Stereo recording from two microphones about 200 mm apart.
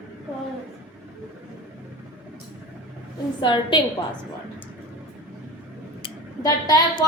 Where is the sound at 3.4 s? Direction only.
25° left (ahead or behind).